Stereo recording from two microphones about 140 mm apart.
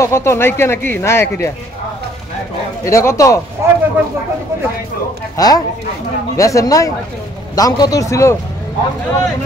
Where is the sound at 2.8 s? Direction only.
20° left (ahead or behind).